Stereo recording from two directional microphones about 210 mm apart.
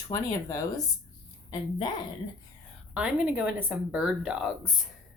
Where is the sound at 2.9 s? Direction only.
5° right (ahead or behind).